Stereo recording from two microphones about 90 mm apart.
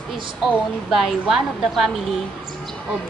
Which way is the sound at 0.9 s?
Centre (ahead or behind).